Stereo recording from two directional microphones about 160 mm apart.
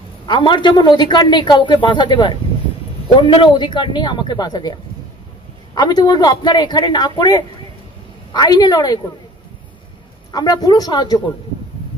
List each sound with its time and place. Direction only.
0.3 s a man's voice: 30° left (ahead or behind)
5.8 s a man's voice: 25° left (ahead or behind)
10.3 s a man's voice: 25° left (ahead or behind)